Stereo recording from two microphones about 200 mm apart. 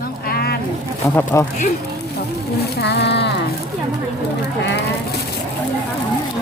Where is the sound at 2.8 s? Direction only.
55° left (ahead or behind).